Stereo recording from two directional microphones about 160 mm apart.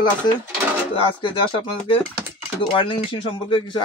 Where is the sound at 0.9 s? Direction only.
30° left (ahead or behind).